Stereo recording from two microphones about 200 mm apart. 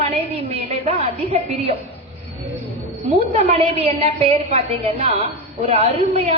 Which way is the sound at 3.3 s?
30° right (ahead or behind).